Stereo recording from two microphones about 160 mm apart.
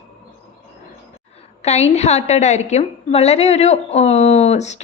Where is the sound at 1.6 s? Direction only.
40° left (ahead or behind).